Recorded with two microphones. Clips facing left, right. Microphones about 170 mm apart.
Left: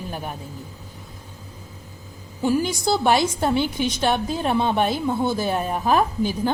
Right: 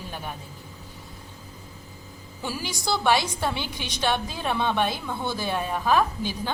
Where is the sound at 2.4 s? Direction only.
50° left (ahead or behind).